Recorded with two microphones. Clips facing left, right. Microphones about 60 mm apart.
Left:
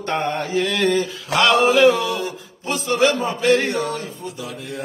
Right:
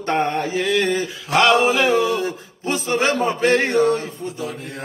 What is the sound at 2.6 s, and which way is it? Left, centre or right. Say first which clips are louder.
Mantra: left 2 dB; right.